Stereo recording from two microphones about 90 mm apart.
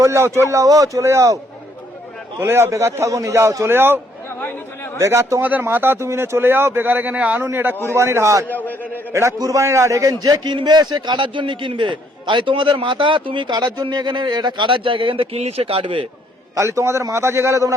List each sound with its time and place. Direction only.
0.0 s a man's voice: 30° right (ahead or behind)
2.4 s a man's voice: 30° right (ahead or behind)
4.4 s speech: 20° left (ahead or behind)
4.9 s a man's voice: 35° right (ahead or behind)
5.4 s a man's voice: 20° right (ahead or behind)
8.4 s a man's voice: 20° left (ahead or behind)
9.4 s a man's voice: 40° right (ahead or behind); by 16.0 s 80° right
16.6 s a man's voice: 35° right (ahead or behind)